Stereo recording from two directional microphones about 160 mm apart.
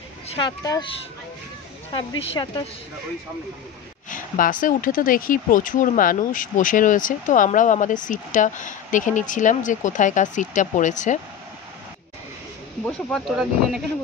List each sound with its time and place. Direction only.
0.7 s speech: 30° left (ahead or behind)
2.0 s speech: 35° left (ahead or behind)
4.1 s speech: 60° left (ahead or behind)
12.8 s speech: centre (ahead or behind)